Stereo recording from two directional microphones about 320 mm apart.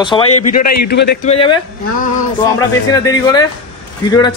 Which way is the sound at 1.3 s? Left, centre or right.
Centre.